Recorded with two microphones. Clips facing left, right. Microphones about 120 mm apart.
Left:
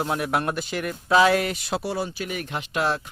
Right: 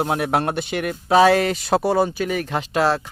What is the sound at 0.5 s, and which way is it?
Speech, 70° right (ahead or behind).